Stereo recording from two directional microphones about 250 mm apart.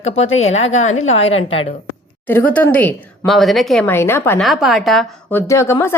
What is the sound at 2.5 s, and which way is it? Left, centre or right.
A woman's voice, centre.